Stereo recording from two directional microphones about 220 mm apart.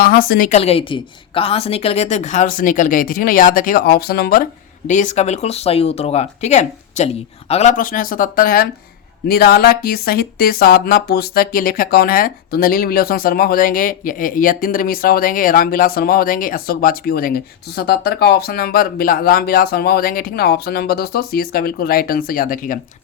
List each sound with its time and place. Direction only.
0.0 s a woman's voice: 40° left (ahead or behind)